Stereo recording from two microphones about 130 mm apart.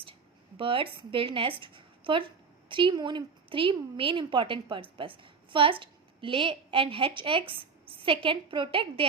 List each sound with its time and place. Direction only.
0.0 s speech: 45° right (ahead or behind)